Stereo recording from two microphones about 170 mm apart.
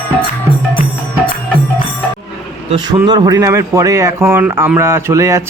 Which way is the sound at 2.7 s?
25° right (ahead or behind).